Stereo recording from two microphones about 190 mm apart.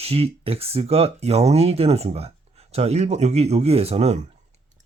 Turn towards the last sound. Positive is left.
turn(degrees=-35)  # may be behind; listen again after turning